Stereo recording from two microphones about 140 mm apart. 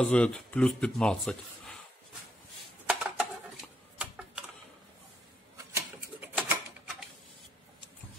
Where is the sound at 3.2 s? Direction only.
5° right (ahead or behind).